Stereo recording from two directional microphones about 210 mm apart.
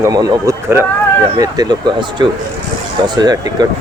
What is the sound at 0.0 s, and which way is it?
Speech, 15° right (ahead or behind).